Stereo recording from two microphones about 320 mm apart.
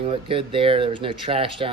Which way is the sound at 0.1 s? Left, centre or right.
Centre.